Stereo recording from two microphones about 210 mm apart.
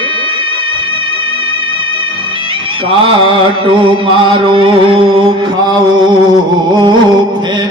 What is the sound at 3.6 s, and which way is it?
Music, 25° right (ahead or behind).